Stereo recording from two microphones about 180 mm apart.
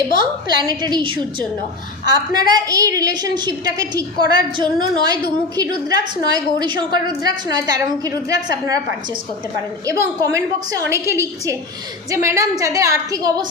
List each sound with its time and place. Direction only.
0.6 s a woman's voice: 20° right (ahead or behind)
9.8 s a woman's voice: 15° right (ahead or behind)